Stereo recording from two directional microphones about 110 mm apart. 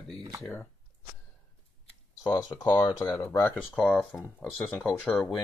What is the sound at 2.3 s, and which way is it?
Speech, 40° left (ahead or behind).